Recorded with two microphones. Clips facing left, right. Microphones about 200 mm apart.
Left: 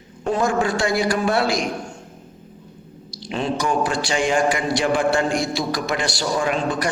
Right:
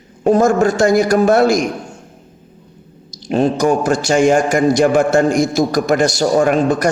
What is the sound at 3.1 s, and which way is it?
A man's voice, 45° right (ahead or behind).